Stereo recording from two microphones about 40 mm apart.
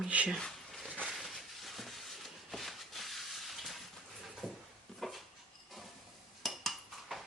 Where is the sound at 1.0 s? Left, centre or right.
Centre.